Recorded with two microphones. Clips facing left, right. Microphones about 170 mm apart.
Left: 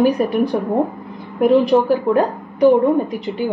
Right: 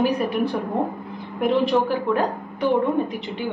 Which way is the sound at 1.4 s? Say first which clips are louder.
Left 6 dB; 40° left (ahead or behind).